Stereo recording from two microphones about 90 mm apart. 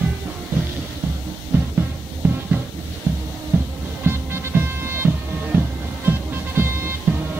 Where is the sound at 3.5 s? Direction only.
30° right (ahead or behind).